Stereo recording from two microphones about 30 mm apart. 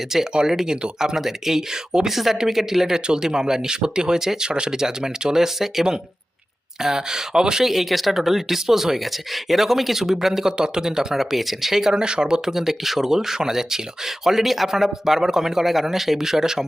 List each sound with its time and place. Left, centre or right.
0.1 s speech: centre
2.0 s speech: centre; by 4.8 s right
5.2 s speech: centre
6.8 s speech: centre
7.6 s speech: centre
11.2 s speech: centre
12.0 s speech: right
12.5 s speech: centre